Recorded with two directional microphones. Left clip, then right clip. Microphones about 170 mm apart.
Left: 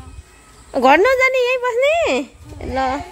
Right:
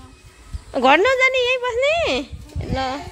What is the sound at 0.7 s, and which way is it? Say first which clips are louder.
Speech: left 3 dB; 10° left (ahead or behind).